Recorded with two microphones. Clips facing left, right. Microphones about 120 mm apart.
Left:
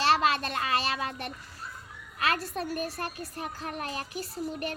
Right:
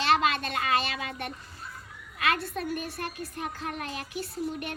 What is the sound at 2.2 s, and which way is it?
A child's voice, 35° left (ahead or behind).